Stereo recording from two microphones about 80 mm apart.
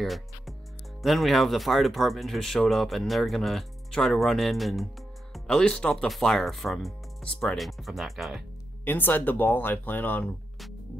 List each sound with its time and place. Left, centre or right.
0.0 s speech: centre
7.5 s speech: centre
8.8 s speech: left